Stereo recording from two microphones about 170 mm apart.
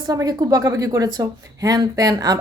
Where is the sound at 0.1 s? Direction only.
20° right (ahead or behind).